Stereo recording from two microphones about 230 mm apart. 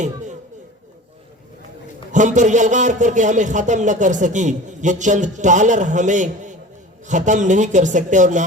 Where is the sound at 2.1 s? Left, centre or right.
Right.